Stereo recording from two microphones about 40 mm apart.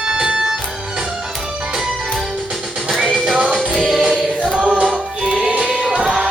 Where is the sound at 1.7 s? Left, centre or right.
Centre.